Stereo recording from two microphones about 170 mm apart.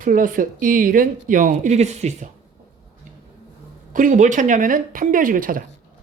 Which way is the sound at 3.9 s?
50° right (ahead or behind).